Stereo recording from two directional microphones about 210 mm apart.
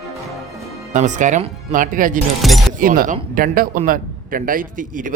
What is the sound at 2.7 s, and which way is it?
A man's voice, 40° right (ahead or behind).